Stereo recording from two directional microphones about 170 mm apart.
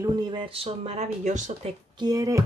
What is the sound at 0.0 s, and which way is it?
Speech, 25° right (ahead or behind).